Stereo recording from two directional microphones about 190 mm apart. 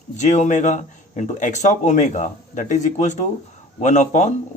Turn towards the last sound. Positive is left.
turn(degrees=40)  # may be behind; listen again after turning